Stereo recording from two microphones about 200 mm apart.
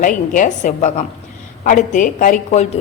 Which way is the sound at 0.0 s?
40° left (ahead or behind).